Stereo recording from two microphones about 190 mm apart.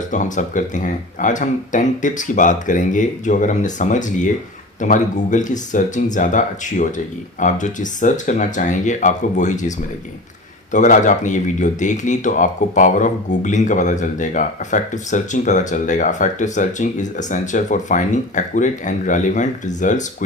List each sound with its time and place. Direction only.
0.1 s speech: 40° left (ahead or behind)